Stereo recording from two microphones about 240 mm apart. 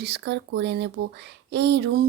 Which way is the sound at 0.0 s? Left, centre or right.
Right.